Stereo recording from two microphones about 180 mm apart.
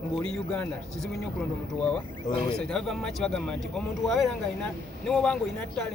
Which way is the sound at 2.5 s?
5° left (ahead or behind).